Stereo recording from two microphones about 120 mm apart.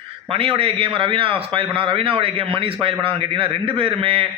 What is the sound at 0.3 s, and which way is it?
A man's voice, 50° right (ahead or behind).